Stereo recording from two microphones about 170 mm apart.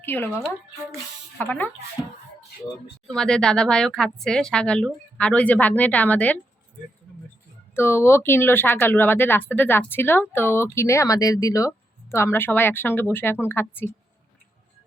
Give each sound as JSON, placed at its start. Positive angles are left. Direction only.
{"t": 0.0, "sound": "speech", "side_deg": 10}
{"t": 1.4, "sound": "speech", "side_deg": 10}
{"t": 3.1, "sound": "speech", "side_deg": 5}
{"t": 7.8, "sound": "speech", "side_deg": 15}